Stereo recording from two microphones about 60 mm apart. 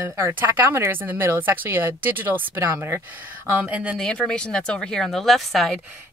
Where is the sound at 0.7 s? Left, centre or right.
Right.